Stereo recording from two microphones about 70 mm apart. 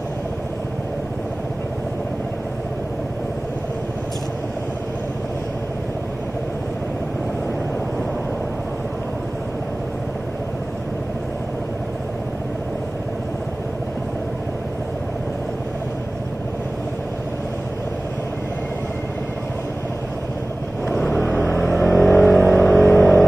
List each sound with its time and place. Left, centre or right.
21.4 s vehicle: left
21.7 s vehicle: centre